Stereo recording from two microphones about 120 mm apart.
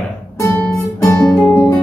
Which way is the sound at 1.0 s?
25° left (ahead or behind).